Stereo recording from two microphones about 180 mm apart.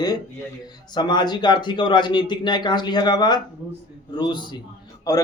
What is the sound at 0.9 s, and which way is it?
A man's voice, 25° left (ahead or behind).